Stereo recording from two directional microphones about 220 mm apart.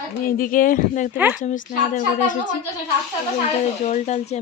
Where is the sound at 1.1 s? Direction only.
10° right (ahead or behind).